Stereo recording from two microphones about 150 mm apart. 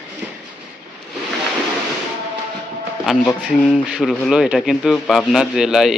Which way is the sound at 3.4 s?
Centre (ahead or behind).